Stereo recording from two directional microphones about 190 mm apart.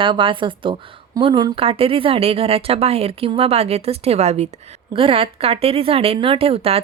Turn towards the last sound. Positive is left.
turn(degrees=-30)  # may be behind; listen again after turning